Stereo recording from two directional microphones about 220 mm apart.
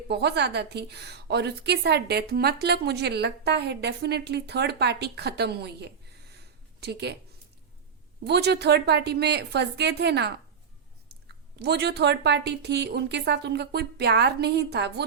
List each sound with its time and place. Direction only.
0.1 s a woman's voice: 50° right (ahead or behind)
8.2 s a woman's voice: 50° right (ahead or behind)